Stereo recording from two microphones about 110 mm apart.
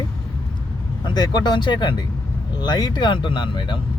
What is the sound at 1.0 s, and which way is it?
Speech, 40° left (ahead or behind).